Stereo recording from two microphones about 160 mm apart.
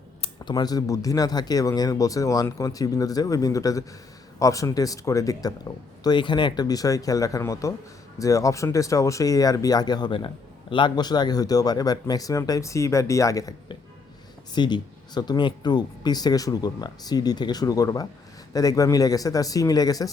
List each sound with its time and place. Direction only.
0.2 s speech: 25° left (ahead or behind)